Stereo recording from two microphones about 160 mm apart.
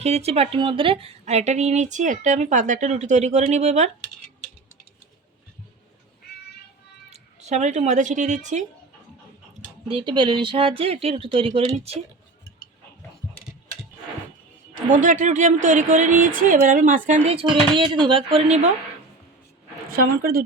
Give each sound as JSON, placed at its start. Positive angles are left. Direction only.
{"t": 0.0, "sound": "speech", "side_deg": -40}
{"t": 7.1, "sound": "speech", "side_deg": -45}
{"t": 9.9, "sound": "speech", "side_deg": -30}
{"t": 14.8, "sound": "speech", "side_deg": -55}
{"t": 17.4, "sound": "speech", "side_deg": -30}
{"t": 19.9, "sound": "a woman's voice", "side_deg": -65}